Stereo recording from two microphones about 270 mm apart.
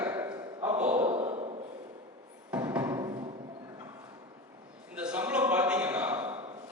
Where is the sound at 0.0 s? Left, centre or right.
Centre.